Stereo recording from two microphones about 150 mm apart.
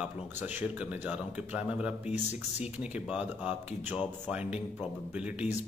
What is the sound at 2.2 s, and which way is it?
Speech, 50° left (ahead or behind).